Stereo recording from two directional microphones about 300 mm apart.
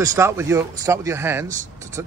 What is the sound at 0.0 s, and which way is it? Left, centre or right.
Speech, centre.